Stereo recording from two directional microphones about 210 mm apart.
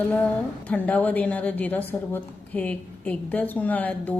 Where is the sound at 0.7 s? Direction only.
5° left (ahead or behind).